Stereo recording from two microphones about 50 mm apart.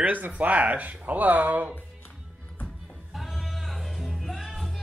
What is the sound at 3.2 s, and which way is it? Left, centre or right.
Music, centre.